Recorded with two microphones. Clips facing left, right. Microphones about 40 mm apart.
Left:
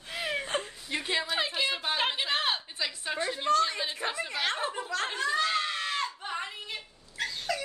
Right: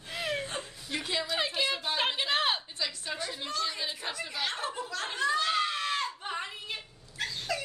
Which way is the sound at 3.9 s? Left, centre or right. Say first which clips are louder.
Left 4 dB; left.